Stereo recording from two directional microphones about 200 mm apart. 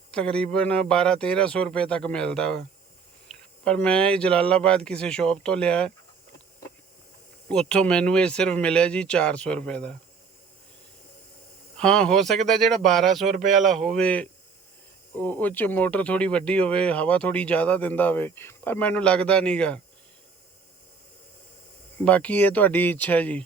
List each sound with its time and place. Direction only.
0.1 s speech: 5° left (ahead or behind)
7.4 s speech: 5° left (ahead or behind)
11.8 s speech: 5° left (ahead or behind)
13.3 s speech: 40° right (ahead or behind)
13.6 s speech: centre (ahead or behind)
21.9 s speech: 5° left (ahead or behind)